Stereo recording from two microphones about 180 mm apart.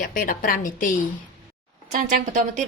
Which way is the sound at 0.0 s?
50° left (ahead or behind).